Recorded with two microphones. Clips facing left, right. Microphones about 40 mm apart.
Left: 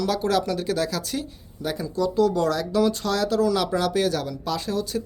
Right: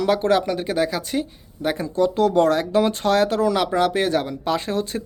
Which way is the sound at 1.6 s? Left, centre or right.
Right.